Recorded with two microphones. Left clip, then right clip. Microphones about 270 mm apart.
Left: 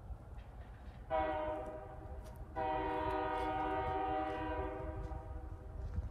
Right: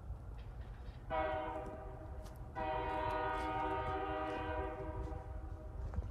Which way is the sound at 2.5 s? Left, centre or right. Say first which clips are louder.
Left 2 dB; left.